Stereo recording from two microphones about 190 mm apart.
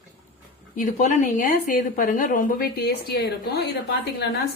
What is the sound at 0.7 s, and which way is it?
A woman's voice, 40° left (ahead or behind).